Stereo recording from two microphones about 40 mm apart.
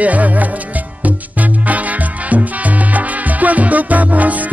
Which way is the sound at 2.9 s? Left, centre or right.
Right.